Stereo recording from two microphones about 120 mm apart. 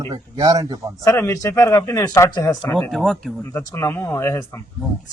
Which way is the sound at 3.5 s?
20° left (ahead or behind).